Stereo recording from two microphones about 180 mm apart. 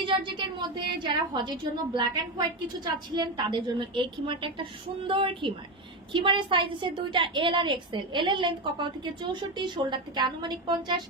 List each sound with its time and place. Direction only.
0.0 s a woman's voice: 30° right (ahead or behind)